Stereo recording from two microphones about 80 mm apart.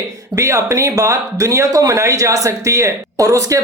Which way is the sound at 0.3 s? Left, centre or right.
Right.